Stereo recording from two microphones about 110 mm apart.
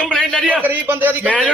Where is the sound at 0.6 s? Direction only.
15° right (ahead or behind).